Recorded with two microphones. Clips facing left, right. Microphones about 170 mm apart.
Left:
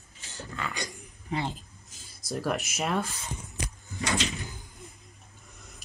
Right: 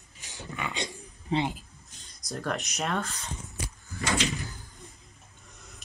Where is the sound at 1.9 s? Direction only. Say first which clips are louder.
Left 3 dB; 5° left (ahead or behind).